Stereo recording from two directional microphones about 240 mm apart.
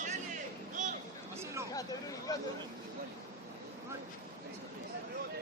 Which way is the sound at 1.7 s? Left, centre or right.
Centre.